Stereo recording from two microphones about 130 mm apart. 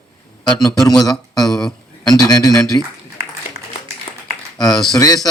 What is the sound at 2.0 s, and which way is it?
Speech, 30° left (ahead or behind).